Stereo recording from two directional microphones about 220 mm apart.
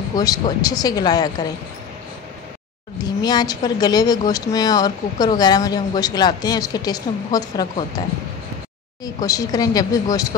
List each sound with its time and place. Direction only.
0.1 s speech: 15° left (ahead or behind)
3.0 s speech: 20° left (ahead or behind)
9.0 s speech: 15° left (ahead or behind)